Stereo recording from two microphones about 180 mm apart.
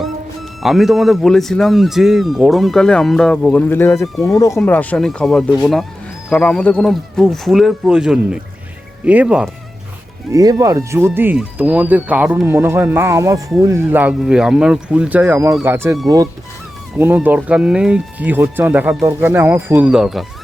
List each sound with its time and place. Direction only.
0.6 s speech: centre (ahead or behind)
4.0 s speech: centre (ahead or behind)
4.4 s speech: 15° left (ahead or behind); by 9.5 s 5° right (ahead or behind)
10.3 s speech: 20° right (ahead or behind)
17.2 s speech: 5° right (ahead or behind)